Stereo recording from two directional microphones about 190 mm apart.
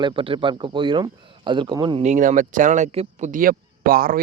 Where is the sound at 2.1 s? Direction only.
40° right (ahead or behind).